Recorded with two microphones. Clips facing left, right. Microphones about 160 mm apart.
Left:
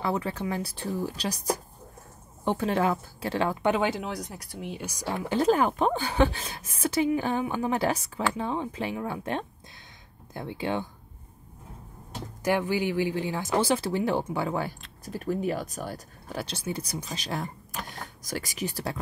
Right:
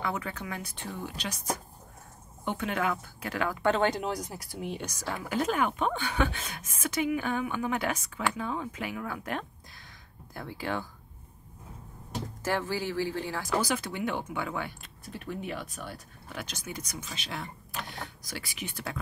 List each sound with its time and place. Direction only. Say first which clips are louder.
0.0 s speech: left 5 dB; 30° left (ahead or behind)
3.6 s speech: right 3 dB; 10° left (ahead or behind)
4.9 s speech: left 6 dB; 20° left (ahead or behind)
12.4 s speech: left 5 dB; 15° left (ahead or behind); by 18.9 s 35° left (ahead or behind)